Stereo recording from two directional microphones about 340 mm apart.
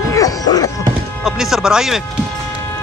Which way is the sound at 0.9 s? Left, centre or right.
Centre.